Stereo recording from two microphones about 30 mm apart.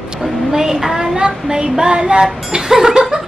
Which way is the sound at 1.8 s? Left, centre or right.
Right.